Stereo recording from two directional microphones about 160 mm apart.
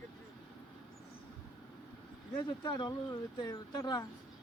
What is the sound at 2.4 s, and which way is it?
Speech, 30° left (ahead or behind).